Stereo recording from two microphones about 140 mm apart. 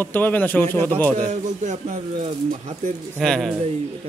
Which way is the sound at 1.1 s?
60° right (ahead or behind).